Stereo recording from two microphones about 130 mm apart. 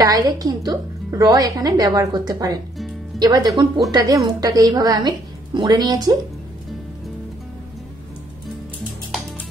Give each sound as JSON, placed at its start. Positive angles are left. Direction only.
{"t": 0.0, "sound": "a woman's voice", "side_deg": -30}